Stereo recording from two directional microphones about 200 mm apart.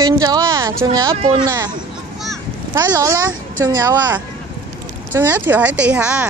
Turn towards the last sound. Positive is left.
turn(degrees=-5)  # may be behind; listen again after turning